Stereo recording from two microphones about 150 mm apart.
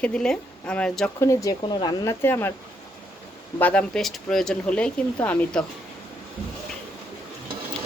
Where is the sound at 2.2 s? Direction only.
15° left (ahead or behind).